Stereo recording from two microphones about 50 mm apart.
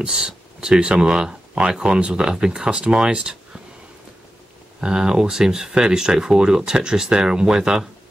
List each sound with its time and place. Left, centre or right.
0.0 s speech: centre
4.7 s speech: centre